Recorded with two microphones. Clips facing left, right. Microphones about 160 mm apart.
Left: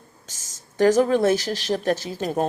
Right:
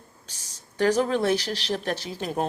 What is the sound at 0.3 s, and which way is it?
Speech, 45° left (ahead or behind).